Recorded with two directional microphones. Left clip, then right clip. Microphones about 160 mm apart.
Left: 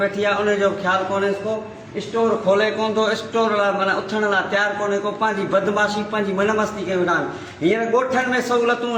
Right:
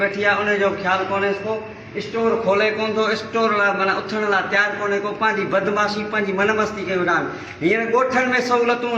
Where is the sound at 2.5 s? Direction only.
5° left (ahead or behind).